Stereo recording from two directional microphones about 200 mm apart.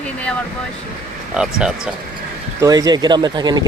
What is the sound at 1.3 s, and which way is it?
Speech, 5° right (ahead or behind).